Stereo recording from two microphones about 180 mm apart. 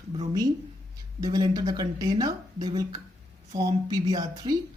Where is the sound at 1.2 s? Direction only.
20° right (ahead or behind).